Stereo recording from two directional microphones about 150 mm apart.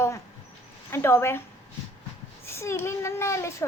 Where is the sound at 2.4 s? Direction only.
15° left (ahead or behind).